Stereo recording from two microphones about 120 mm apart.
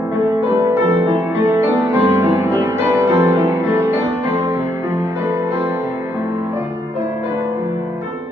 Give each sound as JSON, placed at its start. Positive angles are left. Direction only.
{"t": 0.5, "sound": "music", "side_deg": -25}